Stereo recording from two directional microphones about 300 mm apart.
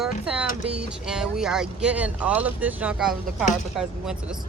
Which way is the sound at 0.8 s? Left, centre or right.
Centre.